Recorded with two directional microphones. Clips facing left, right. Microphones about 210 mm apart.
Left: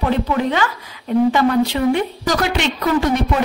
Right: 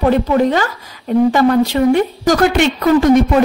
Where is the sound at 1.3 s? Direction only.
45° right (ahead or behind).